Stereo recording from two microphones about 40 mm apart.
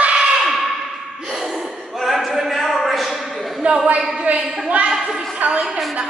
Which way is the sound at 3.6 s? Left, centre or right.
Right.